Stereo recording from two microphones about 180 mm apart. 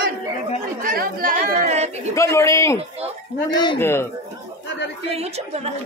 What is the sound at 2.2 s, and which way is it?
A man's voice, 15° left (ahead or behind).